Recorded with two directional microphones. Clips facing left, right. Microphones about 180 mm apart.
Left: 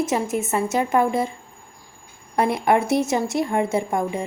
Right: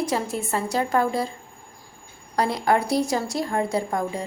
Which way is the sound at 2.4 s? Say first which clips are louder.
Left 3 dB; 25° left (ahead or behind).